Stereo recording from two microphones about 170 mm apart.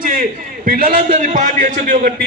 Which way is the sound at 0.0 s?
55° right (ahead or behind).